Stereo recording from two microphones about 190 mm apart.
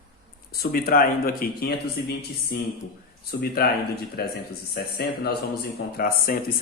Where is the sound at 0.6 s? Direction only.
50° left (ahead or behind).